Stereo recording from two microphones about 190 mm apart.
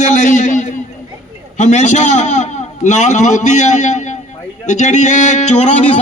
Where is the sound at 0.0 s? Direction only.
40° left (ahead or behind).